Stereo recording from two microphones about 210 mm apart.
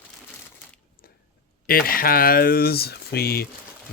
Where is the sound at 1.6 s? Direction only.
45° left (ahead or behind).